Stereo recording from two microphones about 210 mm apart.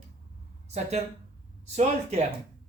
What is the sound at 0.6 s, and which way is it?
A woman's voice, 30° right (ahead or behind).